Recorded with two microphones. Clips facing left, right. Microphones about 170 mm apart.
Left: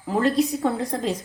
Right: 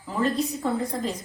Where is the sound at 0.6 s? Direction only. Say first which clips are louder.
Left 3 dB; 75° left (ahead or behind).